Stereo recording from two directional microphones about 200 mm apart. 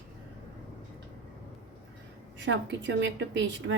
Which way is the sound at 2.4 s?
65° right (ahead or behind).